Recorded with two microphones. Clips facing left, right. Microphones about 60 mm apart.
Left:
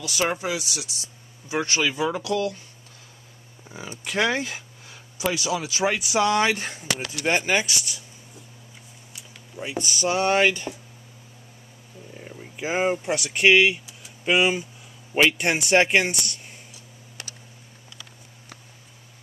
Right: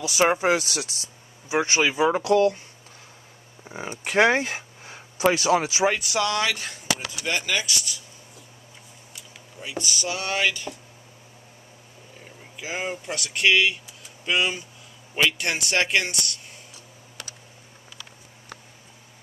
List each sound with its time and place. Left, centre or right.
0.0 s speech: right
0.4 s speech: right
1.5 s speech: right
3.6 s speech: right
5.9 s speech: centre
6.1 s a man's voice: left
9.6 s a man's voice: left
12.6 s a man's voice: left